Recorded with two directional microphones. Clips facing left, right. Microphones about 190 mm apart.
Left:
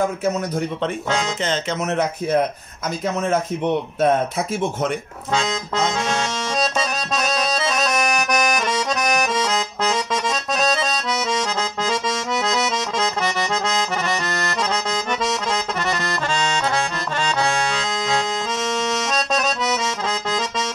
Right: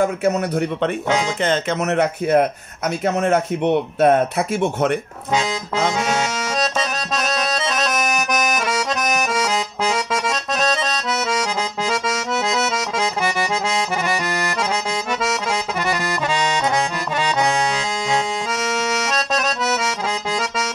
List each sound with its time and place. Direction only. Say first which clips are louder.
1.4 s speech: right 3 dB; 55° right (ahead or behind)
5.3 s accordion: right 1 dB; 10° right (ahead or behind)
16.3 s accordion: right 2 dB; 15° right (ahead or behind)
18.6 s accordion: even; 5° right (ahead or behind)